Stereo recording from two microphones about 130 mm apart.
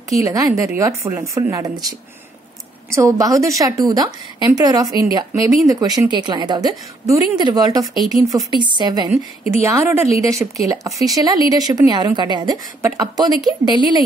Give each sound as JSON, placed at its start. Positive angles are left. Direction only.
{"t": 0.1, "sound": "a woman's voice", "side_deg": -25}
{"t": 2.9, "sound": "a woman's voice", "side_deg": -25}
{"t": 9.6, "sound": "a woman's voice", "side_deg": -20}
{"t": 12.8, "sound": "a woman's voice", "side_deg": -25}